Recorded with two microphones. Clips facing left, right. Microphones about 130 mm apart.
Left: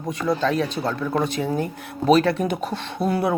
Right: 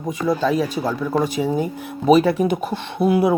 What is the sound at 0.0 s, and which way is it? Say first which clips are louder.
Speech: right 2 dB; 5° right (ahead or behind).